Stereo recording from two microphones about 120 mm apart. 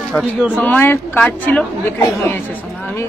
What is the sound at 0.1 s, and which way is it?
Speech, 5° right (ahead or behind).